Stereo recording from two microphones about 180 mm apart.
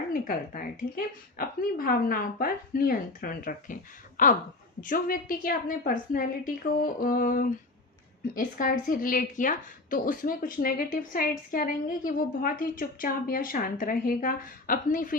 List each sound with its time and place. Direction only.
0.1 s a woman's voice: 50° left (ahead or behind)